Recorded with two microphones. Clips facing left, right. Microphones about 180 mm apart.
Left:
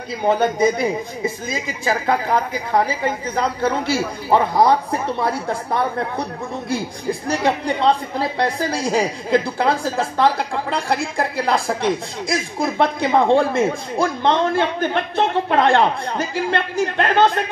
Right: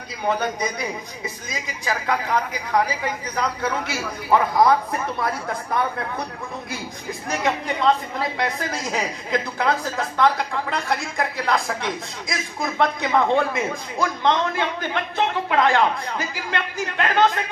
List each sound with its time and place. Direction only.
0.2 s a woman's voice: 25° left (ahead or behind)